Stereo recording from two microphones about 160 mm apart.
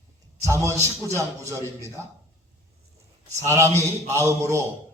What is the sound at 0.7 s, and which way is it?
Speech, 15° left (ahead or behind).